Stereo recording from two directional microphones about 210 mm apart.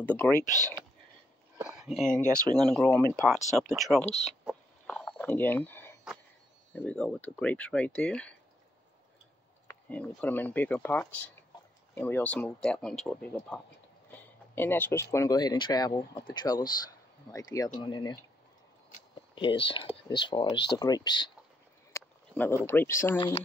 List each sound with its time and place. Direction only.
0.0 s speech: 10° left (ahead or behind)
1.8 s speech: centre (ahead or behind)
4.0 s speech: 30° left (ahead or behind)
4.5 s a sound: 5° left (ahead or behind)
6.7 s speech: 5° left (ahead or behind)
9.7 s speech: 5° left (ahead or behind)
11.5 s a sound: 20° left (ahead or behind)
11.9 s speech: 10° left (ahead or behind)
19.3 s speech: 25° left (ahead or behind)
21.9 s a sound: 10° left (ahead or behind)
22.7 s speech: 10° left (ahead or behind)
23.1 s speech: 25° left (ahead or behind)